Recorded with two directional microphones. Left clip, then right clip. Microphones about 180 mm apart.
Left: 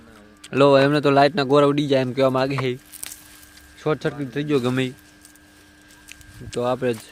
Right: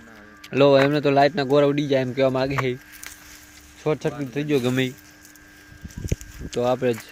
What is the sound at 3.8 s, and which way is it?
Speech, 20° left (ahead or behind).